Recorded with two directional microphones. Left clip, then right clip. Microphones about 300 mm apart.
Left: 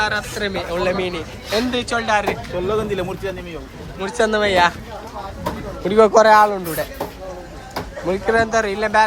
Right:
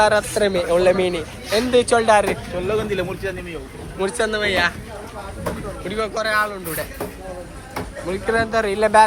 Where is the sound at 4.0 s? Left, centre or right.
Centre.